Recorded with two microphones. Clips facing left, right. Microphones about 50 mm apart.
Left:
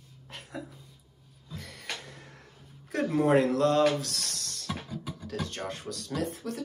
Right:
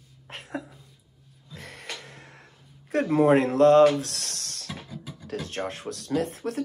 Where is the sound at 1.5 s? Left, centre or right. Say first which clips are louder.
Right 1 dB; right.